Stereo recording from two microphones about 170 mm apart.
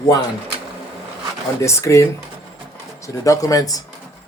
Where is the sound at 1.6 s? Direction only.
15° left (ahead or behind).